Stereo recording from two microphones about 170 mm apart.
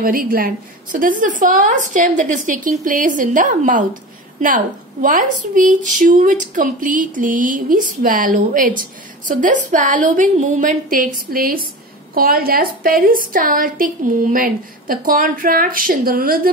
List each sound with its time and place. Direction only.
0.0 s a woman's voice: 55° right (ahead or behind)